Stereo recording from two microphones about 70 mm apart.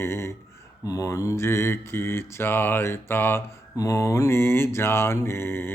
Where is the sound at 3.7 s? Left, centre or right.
Left.